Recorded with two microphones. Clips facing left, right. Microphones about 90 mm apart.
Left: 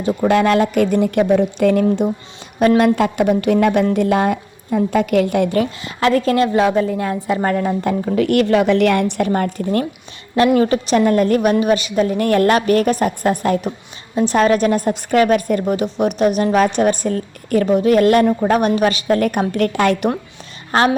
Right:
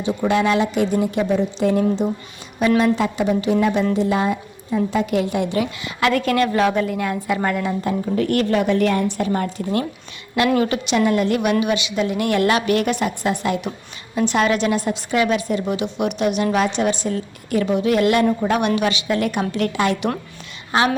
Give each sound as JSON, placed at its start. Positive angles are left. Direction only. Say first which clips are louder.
{"t": 0.2, "sound": "a woman's voice", "louder": "left 4 dB", "side_deg": 55}
{"t": 2.6, "sound": "a woman's voice", "louder": "left 4 dB", "side_deg": 50}
{"t": 7.9, "sound": "a woman's voice", "louder": "left 3 dB", "side_deg": 75}
{"t": 9.3, "sound": "a woman's voice", "louder": "left 3 dB", "side_deg": 50}
{"t": 10.6, "sound": "a woman's voice", "louder": "left 4 dB", "side_deg": 40}